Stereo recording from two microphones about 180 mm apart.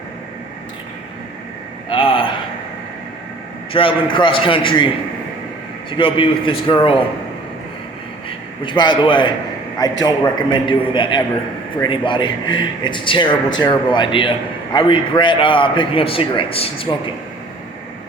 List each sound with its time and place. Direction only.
1.9 s a sound: 30° left (ahead or behind)
3.7 s a man's voice: 30° left (ahead or behind)
5.9 s a man's voice: 30° left (ahead or behind)
8.6 s a man's voice: 25° left (ahead or behind)